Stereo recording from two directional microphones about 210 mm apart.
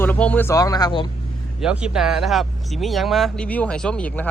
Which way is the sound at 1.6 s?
5° right (ahead or behind).